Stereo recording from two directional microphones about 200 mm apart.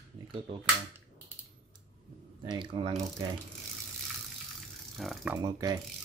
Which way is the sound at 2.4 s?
25° right (ahead or behind).